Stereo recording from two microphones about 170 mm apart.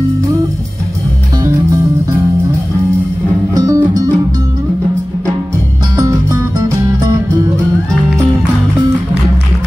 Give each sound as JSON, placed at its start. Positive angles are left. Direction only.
{"t": 3.5, "sound": "music", "side_deg": -20}
{"t": 6.0, "sound": "music", "side_deg": -20}